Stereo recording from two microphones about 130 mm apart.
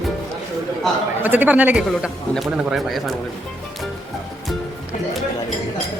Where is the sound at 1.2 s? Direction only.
15° right (ahead or behind).